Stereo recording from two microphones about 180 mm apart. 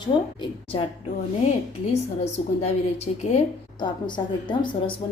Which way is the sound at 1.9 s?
35° left (ahead or behind).